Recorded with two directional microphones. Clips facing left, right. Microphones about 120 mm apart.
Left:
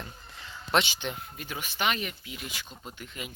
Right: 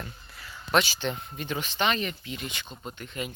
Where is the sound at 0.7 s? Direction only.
20° left (ahead or behind).